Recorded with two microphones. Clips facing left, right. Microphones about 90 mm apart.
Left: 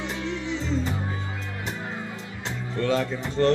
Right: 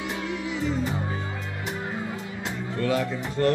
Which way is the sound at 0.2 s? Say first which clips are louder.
Left 1 dB; 15° right (ahead or behind).